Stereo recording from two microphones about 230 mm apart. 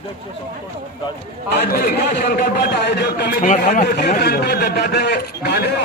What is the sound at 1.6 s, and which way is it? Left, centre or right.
A man's voice, left.